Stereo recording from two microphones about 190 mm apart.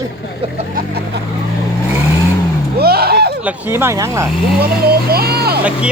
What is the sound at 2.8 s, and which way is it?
Vehicle, 55° right (ahead or behind).